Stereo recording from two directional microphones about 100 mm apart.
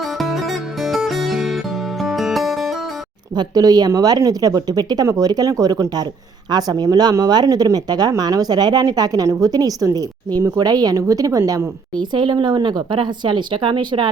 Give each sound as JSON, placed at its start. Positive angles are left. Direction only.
{"t": 0.0, "sound": "music", "side_deg": 0}
{"t": 3.3, "sound": "speech", "side_deg": -40}
{"t": 11.9, "sound": "speech", "side_deg": -50}